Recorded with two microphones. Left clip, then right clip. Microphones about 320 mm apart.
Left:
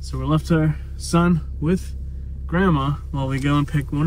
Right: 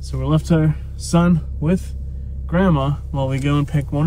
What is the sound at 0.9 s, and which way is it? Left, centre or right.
Speech, centre.